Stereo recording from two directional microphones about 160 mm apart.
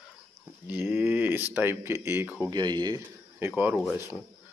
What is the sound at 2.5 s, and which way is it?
Speech, 25° right (ahead or behind).